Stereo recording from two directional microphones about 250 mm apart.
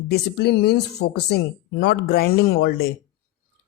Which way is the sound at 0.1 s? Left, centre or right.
Left.